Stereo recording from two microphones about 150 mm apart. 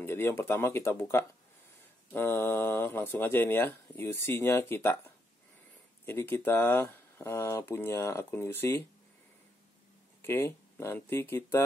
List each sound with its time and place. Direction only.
0.0 s speech: 15° left (ahead or behind)
10.2 s speech: 15° left (ahead or behind)